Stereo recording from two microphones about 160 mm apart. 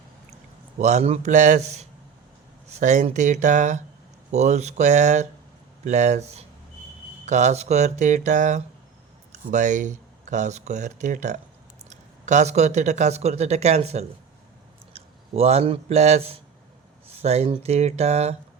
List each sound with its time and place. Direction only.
0.8 s speech: 45° right (ahead or behind)
17.1 s a sound: 40° right (ahead or behind)
17.5 s speech: 40° right (ahead or behind)